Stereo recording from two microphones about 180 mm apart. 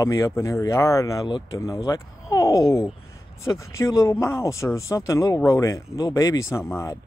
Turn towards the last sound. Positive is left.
turn(degrees=15)  # may be behind; listen again after turning